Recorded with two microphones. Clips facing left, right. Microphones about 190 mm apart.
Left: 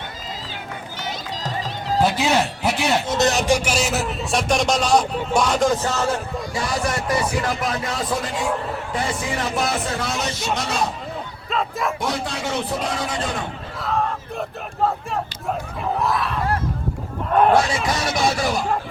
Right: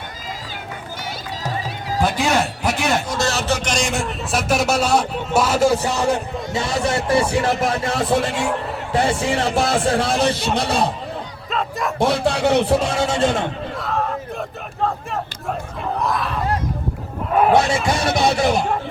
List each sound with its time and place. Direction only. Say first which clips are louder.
2.2 s speech: even; 45° right (ahead or behind)
3.1 s speech: left 3 dB; 20° left (ahead or behind); by 10.2 s 30° right (ahead or behind)
10.2 s speech: right 8 dB; 60° right (ahead or behind)
10.5 s speech: right 4 dB; 30° right (ahead or behind)
11.5 s bow-wow: even; centre (ahead or behind)
12.1 s speech: right 8 dB; 65° right (ahead or behind)
12.8 s speech: right 6 dB; 25° right (ahead or behind)
13.7 s a sound: left 2 dB; centre (ahead or behind)
17.8 s speech: right 3 dB; 25° right (ahead or behind)
18.1 s speech: right 3 dB; 60° right (ahead or behind)
18.3 s speech: right 5 dB; 25° right (ahead or behind)